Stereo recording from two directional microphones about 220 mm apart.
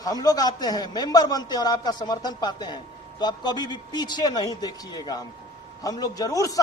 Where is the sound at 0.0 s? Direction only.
15° left (ahead or behind).